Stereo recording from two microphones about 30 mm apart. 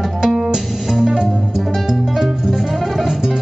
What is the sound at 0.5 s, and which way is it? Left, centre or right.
Music, centre.